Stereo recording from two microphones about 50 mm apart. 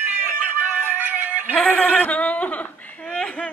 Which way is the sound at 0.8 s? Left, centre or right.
Right.